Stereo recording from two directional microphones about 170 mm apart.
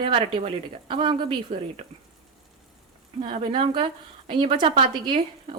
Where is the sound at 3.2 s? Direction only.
30° right (ahead or behind).